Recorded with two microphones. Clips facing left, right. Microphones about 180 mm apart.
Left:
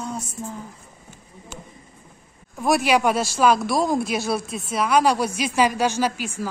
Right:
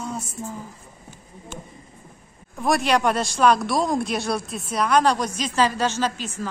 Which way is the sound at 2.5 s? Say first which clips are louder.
Left 1 dB; 5° left (ahead or behind).